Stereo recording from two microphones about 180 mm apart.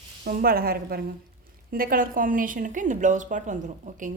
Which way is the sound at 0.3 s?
55° right (ahead or behind).